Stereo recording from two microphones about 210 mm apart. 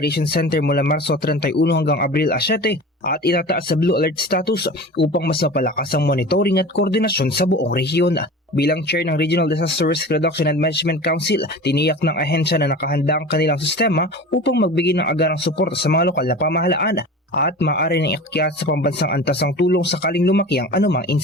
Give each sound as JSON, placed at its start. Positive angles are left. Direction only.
{"t": 0.0, "sound": "speech", "side_deg": 50}